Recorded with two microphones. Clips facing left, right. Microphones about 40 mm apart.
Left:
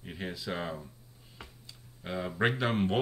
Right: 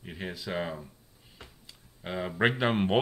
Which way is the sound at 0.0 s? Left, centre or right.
Centre.